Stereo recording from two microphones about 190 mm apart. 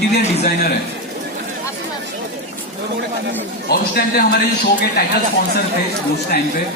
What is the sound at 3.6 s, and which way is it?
Speech, 55° left (ahead or behind).